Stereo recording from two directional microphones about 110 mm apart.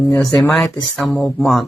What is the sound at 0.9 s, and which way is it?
Speech, 5° left (ahead or behind).